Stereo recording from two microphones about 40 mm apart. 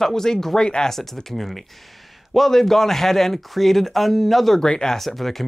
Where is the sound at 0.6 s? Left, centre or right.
Left.